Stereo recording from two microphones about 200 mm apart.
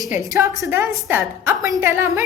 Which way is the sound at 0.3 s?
15° right (ahead or behind).